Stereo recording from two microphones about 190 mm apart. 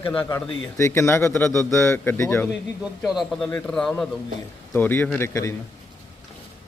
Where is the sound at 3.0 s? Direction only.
Centre (ahead or behind); by 5.5 s 15° left (ahead or behind).